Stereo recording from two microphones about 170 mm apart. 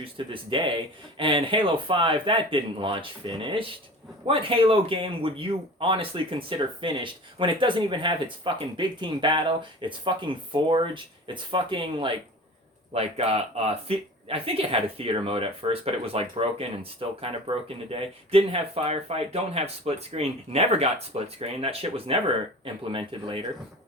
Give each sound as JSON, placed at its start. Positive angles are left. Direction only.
{"t": 0.0, "sound": "speech", "side_deg": -30}